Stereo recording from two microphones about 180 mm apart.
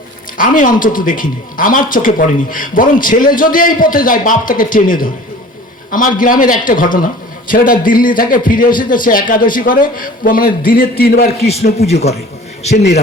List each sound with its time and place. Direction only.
0.3 s a man's voice: 50° left (ahead or behind)
11.3 s a man's voice: 35° left (ahead or behind)
12.7 s a man's voice: 70° left (ahead or behind)